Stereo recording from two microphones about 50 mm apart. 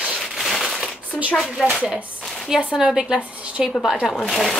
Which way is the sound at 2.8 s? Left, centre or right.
Centre.